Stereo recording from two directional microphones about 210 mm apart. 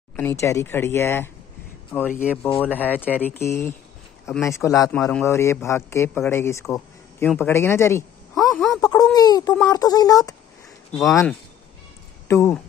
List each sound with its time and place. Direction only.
0.1 s speech: 10° left (ahead or behind)
8.4 s a sound: centre (ahead or behind)
9.1 s speech: 20° left (ahead or behind)
10.9 s speech: centre (ahead or behind)
12.3 s speech: 15° left (ahead or behind)